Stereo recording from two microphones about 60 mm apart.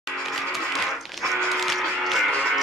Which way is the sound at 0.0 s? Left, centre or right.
Centre.